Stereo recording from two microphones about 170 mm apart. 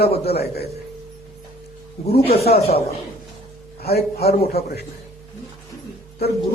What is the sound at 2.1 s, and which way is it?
Speech, 65° left (ahead or behind).